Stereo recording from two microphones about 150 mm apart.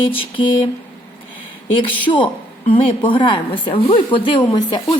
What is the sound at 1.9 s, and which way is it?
A woman's voice, 35° left (ahead or behind).